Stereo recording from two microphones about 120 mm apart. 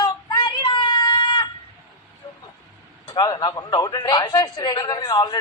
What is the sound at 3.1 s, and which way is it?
A woman's voice, 40° left (ahead or behind).